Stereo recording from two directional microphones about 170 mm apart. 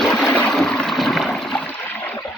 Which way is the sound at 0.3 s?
10° left (ahead or behind).